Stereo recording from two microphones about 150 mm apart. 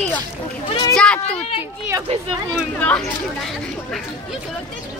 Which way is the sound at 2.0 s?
35° right (ahead or behind).